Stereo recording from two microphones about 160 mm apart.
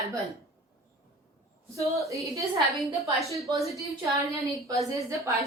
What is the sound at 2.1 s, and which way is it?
Speech, 20° right (ahead or behind).